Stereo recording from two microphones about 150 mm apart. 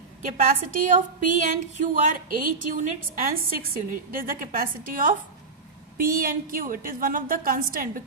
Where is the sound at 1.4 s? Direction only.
60° right (ahead or behind).